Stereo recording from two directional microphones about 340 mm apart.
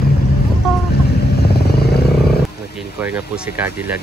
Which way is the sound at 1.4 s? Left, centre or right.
Left.